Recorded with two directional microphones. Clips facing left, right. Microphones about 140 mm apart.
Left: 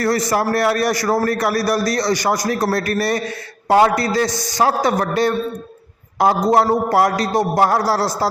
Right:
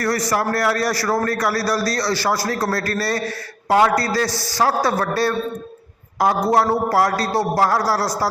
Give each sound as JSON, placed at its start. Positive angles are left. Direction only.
{"t": 0.0, "sound": "a man's voice", "side_deg": 25}